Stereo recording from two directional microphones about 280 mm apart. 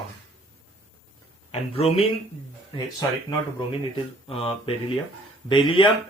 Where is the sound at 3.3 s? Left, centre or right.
Centre.